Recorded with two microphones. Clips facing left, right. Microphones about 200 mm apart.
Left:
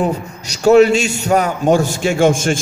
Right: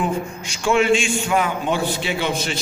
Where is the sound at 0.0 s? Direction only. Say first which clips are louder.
Left 4 dB; 40° left (ahead or behind).